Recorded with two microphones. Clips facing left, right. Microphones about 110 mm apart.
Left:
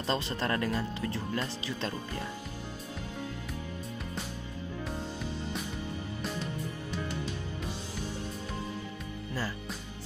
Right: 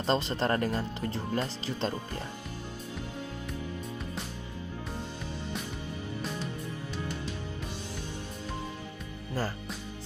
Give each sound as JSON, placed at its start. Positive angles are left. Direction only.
{"t": 0.0, "sound": "speech", "side_deg": -35}